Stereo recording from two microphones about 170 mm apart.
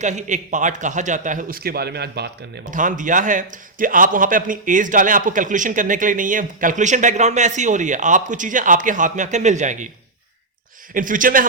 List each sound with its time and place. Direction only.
0.0 s a man's voice: 45° right (ahead or behind); by 2.3 s 75° right (ahead or behind)
2.6 s a man's voice: 50° right (ahead or behind)
10.9 s a man's voice: 50° right (ahead or behind)